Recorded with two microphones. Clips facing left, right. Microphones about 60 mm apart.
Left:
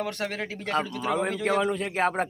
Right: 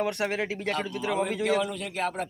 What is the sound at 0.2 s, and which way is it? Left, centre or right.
Speech, centre.